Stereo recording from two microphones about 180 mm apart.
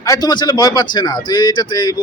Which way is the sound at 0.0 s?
20° left (ahead or behind).